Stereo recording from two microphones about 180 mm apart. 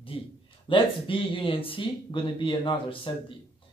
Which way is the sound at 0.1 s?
30° left (ahead or behind).